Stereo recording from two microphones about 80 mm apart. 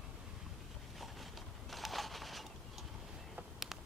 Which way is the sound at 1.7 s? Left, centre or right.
Centre.